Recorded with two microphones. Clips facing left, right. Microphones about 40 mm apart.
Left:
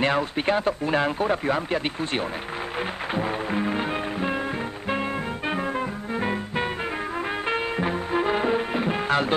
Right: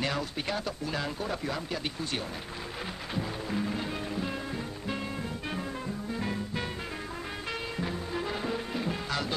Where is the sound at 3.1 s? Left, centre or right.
Left.